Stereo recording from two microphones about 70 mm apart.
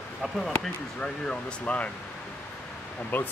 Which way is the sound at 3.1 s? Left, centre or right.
Left.